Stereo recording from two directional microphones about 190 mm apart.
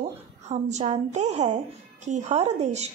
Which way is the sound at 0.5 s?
35° right (ahead or behind).